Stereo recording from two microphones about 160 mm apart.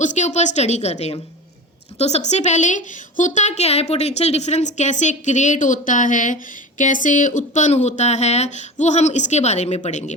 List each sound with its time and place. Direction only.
0.0 s a woman's voice: 50° left (ahead or behind)